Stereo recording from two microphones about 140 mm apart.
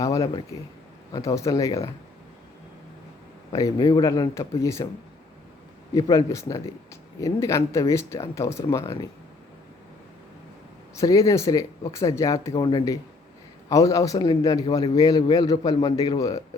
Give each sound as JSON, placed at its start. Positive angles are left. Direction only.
{"t": 0.0, "sound": "a man's voice", "side_deg": 25}
{"t": 3.5, "sound": "a man's voice", "side_deg": 25}
{"t": 5.9, "sound": "a man's voice", "side_deg": 25}
{"t": 10.9, "sound": "a man's voice", "side_deg": 25}
{"t": 13.7, "sound": "a man's voice", "side_deg": 25}